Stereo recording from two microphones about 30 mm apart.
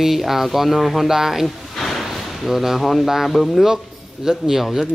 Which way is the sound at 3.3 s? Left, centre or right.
Centre.